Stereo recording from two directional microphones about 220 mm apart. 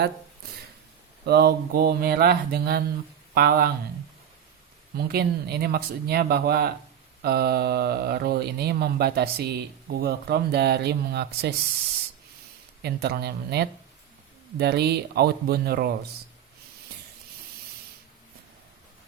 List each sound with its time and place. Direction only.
1.2 s speech: 50° right (ahead or behind)
4.9 s speech: 45° right (ahead or behind)
12.8 s speech: 45° right (ahead or behind)